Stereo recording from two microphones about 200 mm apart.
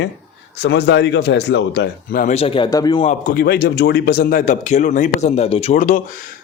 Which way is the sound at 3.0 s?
45° left (ahead or behind).